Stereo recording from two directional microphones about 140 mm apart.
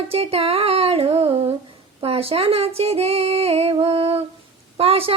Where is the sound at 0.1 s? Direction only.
45° right (ahead or behind).